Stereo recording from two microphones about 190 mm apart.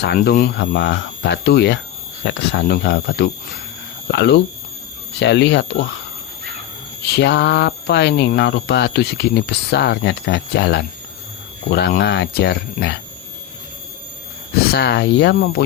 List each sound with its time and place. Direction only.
0.0 s speech: 60° left (ahead or behind)
7.0 s speech: 65° left (ahead or behind)
14.5 s speech: 55° left (ahead or behind)